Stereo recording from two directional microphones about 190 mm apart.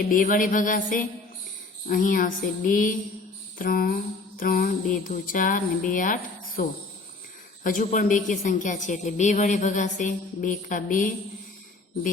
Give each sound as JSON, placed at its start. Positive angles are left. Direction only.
{"t": 0.1, "sound": "a woman's voice", "side_deg": 45}